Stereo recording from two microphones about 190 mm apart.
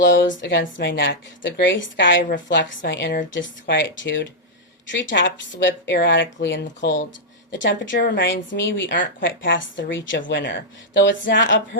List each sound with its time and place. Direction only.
0.3 s a woman's voice: 80° left